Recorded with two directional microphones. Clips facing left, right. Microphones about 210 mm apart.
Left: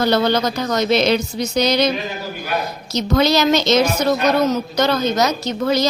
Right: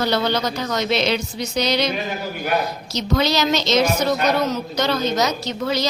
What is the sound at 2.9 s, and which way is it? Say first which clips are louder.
Speech: left 4 dB; 50° left (ahead or behind).